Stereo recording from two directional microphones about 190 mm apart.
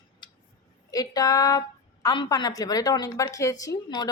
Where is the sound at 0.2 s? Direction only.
25° left (ahead or behind).